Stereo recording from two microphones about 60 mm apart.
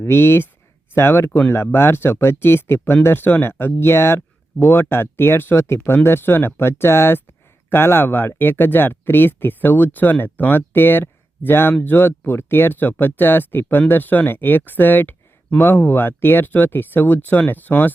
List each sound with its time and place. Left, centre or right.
0.0 s speech: left